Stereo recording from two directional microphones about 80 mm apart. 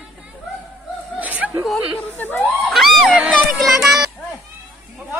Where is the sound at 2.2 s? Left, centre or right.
Left.